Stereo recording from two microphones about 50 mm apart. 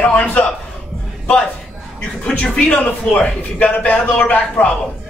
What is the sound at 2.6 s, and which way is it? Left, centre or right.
A man's voice, left.